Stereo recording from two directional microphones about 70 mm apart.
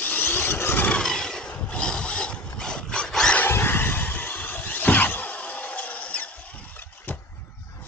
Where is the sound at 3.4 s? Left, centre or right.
Left.